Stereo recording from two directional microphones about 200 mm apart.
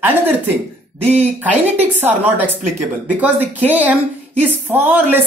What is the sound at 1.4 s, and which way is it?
Speech, 10° right (ahead or behind).